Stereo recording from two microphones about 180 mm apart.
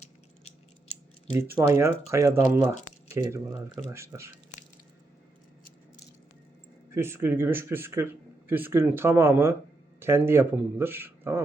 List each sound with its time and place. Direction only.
1.5 s speech: 15° right (ahead or behind)
6.9 s speech: 15° right (ahead or behind)